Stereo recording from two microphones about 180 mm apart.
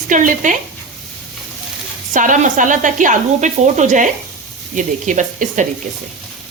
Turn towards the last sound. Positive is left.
turn(degrees=-45)  # may be behind; listen again after turning